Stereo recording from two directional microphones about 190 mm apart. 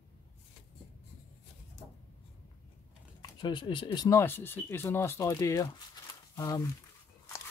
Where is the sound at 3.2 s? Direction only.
25° left (ahead or behind).